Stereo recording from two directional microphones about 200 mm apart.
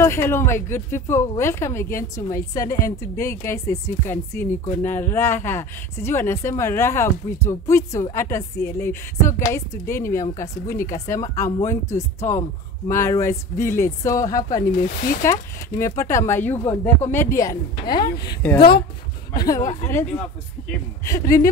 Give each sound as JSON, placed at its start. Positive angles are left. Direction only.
{"t": 0.0, "sound": "speech", "side_deg": 10}
{"t": 14.8, "sound": "speech", "side_deg": 45}
{"t": 15.2, "sound": "speech", "side_deg": 15}
{"t": 18.4, "sound": "speech", "side_deg": 5}
{"t": 19.3, "sound": "speech", "side_deg": 20}